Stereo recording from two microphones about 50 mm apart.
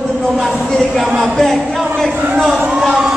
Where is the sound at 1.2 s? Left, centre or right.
Centre.